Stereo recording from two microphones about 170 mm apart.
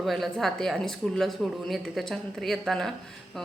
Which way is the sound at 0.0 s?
Centre (ahead or behind).